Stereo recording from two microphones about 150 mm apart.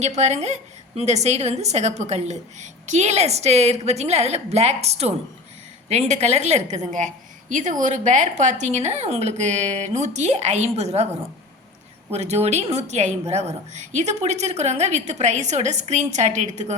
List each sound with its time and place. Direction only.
0.0 s a woman's voice: 50° right (ahead or behind)